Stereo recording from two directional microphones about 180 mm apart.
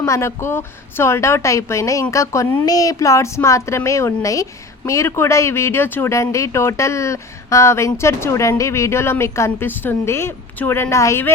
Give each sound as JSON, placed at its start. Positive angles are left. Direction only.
{"t": 0.0, "sound": "speech", "side_deg": 15}